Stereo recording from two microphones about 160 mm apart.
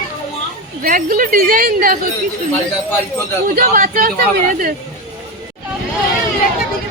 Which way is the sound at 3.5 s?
60° right (ahead or behind).